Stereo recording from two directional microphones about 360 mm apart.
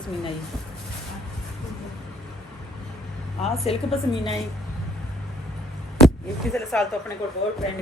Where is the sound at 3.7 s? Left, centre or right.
Centre.